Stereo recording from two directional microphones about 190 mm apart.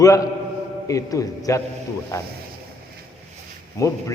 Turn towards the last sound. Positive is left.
turn(degrees=15)  # may be behind; listen again after turning